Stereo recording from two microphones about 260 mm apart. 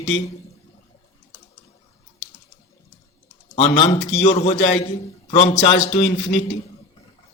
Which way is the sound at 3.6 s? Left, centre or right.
Left.